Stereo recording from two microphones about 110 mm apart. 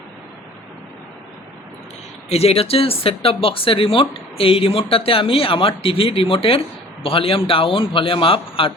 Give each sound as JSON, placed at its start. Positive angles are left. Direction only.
{"t": 2.3, "sound": "speech", "side_deg": 65}